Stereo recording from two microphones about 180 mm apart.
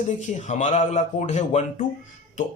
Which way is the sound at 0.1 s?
40° left (ahead or behind).